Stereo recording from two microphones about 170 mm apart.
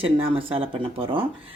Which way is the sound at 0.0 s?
30° right (ahead or behind).